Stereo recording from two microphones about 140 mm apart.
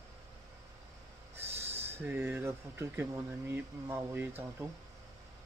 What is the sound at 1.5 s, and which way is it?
Train, 50° right (ahead or behind).